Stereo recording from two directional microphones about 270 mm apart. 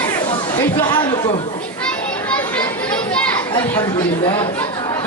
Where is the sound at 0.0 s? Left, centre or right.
Centre.